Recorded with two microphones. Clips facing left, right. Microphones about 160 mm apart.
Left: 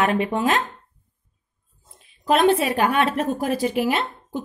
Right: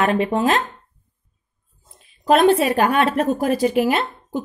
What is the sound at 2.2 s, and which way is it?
A woman's voice, 40° right (ahead or behind).